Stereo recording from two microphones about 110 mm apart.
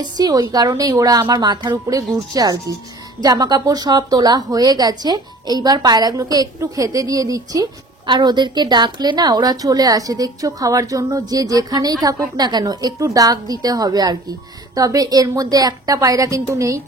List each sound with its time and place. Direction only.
0.0 s a woman's voice: 35° right (ahead or behind)